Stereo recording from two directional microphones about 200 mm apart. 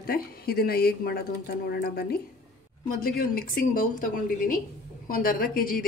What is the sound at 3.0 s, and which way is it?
A woman's voice, 50° left (ahead or behind).